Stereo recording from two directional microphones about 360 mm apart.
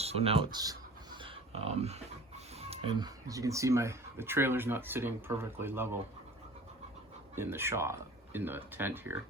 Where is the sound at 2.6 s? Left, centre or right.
Centre.